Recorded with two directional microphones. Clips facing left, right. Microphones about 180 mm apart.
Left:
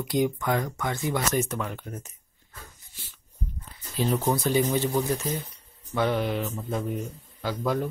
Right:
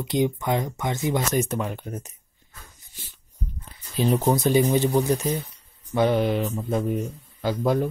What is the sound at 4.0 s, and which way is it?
Speech, 20° right (ahead or behind).